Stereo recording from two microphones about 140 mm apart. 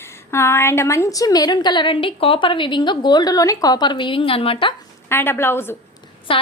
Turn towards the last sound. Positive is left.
turn(degrees=40)  # may be behind; listen again after turning